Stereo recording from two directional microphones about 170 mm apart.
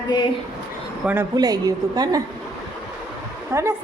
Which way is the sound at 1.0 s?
10° right (ahead or behind).